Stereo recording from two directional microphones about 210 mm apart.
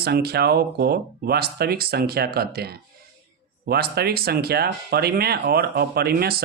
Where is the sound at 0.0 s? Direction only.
50° right (ahead or behind).